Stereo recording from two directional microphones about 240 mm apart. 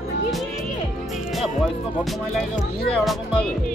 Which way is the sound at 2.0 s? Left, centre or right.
Centre.